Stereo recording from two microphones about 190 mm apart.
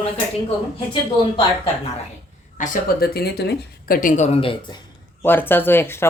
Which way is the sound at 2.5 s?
45° left (ahead or behind).